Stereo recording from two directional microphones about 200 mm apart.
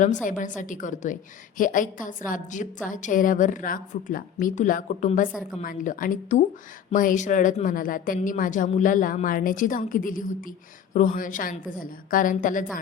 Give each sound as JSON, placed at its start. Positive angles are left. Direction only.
{"t": 0.0, "sound": "a woman's voice", "side_deg": 40}